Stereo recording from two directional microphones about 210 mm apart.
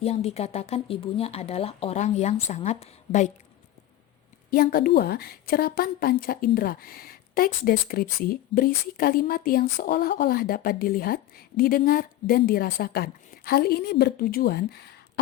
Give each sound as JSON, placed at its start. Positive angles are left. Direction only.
{"t": 0.0, "sound": "speech", "side_deg": 30}
{"t": 4.5, "sound": "a woman's voice", "side_deg": 45}